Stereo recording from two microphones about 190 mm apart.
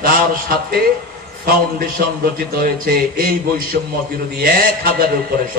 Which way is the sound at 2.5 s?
50° right (ahead or behind).